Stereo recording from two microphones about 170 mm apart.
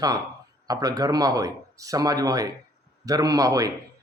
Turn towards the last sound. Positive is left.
turn(degrees=-20)  # may be behind; listen again after turning